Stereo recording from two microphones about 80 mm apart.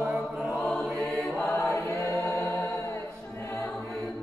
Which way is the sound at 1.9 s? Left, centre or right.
Left.